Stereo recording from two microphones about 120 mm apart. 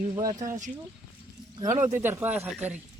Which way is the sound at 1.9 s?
15° right (ahead or behind).